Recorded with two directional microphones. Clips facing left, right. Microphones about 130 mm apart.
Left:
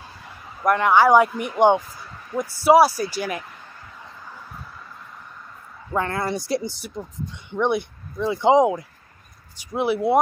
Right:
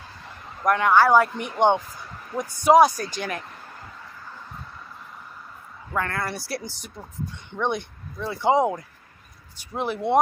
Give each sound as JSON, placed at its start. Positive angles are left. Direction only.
{"t": 0.6, "sound": "speech", "side_deg": 5}
{"t": 5.9, "sound": "speech", "side_deg": 20}